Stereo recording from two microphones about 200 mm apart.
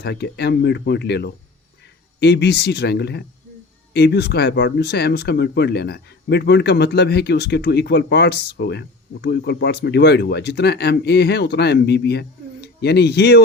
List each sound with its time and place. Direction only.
0.0 s speech: 55° left (ahead or behind)